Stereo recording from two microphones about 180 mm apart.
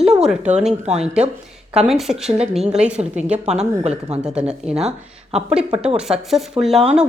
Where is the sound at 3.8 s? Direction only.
35° right (ahead or behind).